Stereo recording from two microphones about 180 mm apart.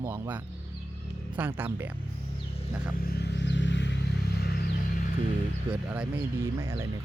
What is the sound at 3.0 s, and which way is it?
Vehicle, 60° left (ahead or behind).